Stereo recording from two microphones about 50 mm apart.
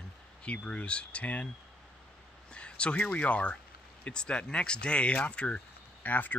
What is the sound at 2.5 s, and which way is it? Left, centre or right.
Speech, left.